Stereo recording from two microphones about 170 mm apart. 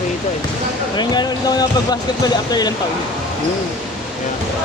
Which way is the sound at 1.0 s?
25° left (ahead or behind).